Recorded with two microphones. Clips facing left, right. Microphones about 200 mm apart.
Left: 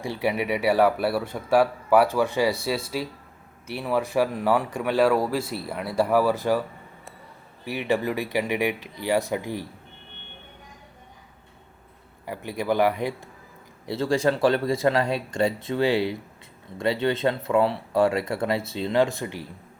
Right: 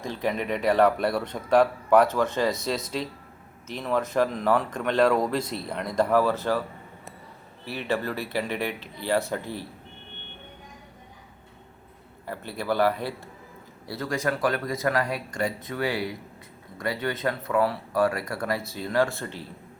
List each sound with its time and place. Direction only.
0.0 s a man's voice: 10° left (ahead or behind)
12.2 s a man's voice: 15° left (ahead or behind)
13.8 s speech: 25° left (ahead or behind)